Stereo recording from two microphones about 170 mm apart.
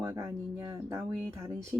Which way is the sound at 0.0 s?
15° right (ahead or behind).